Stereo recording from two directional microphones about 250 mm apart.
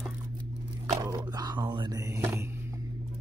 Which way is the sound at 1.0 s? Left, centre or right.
Centre.